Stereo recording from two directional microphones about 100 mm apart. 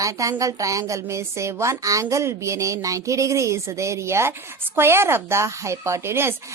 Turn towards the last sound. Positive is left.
turn(degrees=-25)  # may be behind; listen again after turning